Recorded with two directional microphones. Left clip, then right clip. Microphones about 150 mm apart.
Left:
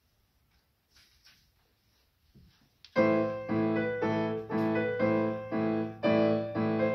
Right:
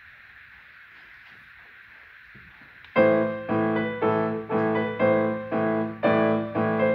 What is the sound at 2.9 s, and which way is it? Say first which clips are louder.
Music: right 7 dB; 30° left (ahead or behind).